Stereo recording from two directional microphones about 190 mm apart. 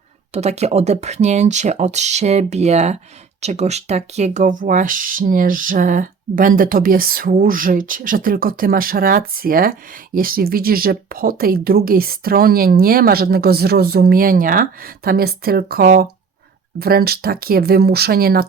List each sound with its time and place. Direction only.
0.3 s speech: 35° right (ahead or behind); by 18.4 s 55° right (ahead or behind)